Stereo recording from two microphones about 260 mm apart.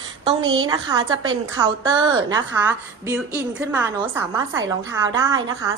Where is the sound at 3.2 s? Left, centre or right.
Centre.